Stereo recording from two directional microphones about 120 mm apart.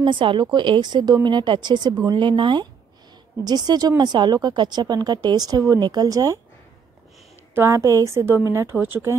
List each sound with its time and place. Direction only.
0.0 s a woman's voice: 45° right (ahead or behind)
7.5 s a woman's voice: 20° right (ahead or behind)